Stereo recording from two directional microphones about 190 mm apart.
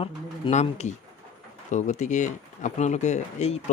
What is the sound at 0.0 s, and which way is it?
Speech, 30° left (ahead or behind).